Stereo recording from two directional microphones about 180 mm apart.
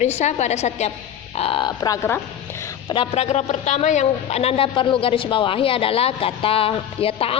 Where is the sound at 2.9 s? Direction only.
30° left (ahead or behind).